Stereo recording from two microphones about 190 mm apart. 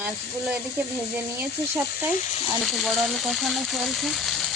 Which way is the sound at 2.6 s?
Centre (ahead or behind).